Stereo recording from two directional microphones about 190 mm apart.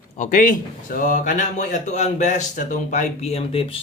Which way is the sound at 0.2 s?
45° left (ahead or behind).